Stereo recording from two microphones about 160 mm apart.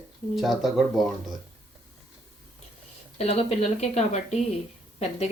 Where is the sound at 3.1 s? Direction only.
40° left (ahead or behind).